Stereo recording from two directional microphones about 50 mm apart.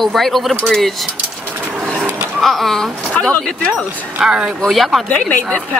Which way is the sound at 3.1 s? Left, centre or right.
Left.